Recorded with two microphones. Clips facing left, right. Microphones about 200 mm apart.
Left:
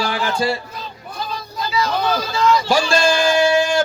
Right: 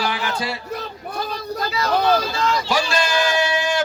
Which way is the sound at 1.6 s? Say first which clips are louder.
Even; 55° right (ahead or behind).